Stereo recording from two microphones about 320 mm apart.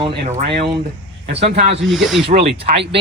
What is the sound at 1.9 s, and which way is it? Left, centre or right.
Speech, centre.